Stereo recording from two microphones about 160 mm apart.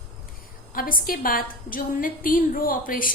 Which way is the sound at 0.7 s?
60° left (ahead or behind).